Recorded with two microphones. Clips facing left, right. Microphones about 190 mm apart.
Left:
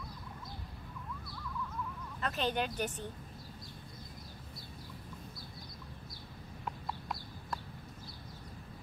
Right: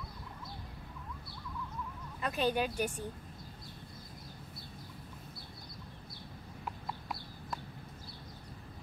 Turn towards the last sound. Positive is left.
turn(degrees=-5)  # may be behind; listen again after turning